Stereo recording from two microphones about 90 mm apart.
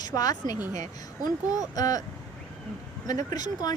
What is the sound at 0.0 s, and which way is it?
Speech, 45° left (ahead or behind).